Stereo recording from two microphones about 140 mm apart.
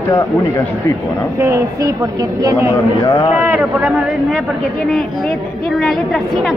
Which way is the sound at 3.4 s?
5° right (ahead or behind).